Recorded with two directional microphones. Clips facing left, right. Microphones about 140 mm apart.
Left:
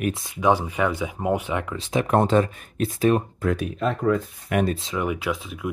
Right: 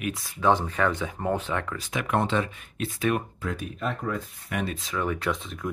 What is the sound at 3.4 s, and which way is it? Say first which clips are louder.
Speech: left 7 dB; 70° left (ahead or behind).